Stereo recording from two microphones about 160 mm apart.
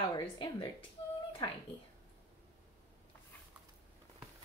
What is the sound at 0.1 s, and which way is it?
Speech, 30° left (ahead or behind).